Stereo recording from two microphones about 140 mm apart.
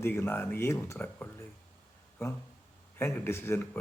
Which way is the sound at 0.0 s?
15° left (ahead or behind).